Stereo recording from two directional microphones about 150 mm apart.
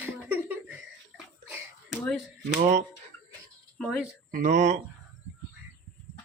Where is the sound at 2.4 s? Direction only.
45° right (ahead or behind).